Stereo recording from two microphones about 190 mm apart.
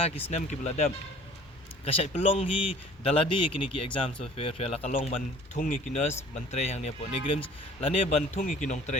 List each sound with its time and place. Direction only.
0.3 s speech: 35° left (ahead or behind)